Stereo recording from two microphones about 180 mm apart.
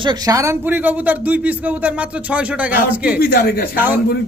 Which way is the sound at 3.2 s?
55° left (ahead or behind).